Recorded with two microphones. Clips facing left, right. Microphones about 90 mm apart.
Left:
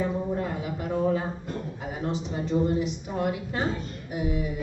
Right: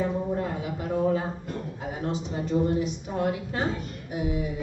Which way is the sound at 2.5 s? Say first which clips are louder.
Even; 10° left (ahead or behind).